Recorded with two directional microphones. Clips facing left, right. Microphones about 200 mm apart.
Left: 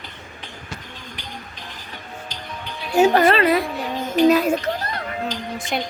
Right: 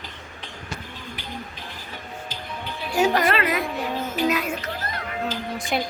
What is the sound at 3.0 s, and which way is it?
A woman's voice, 30° left (ahead or behind).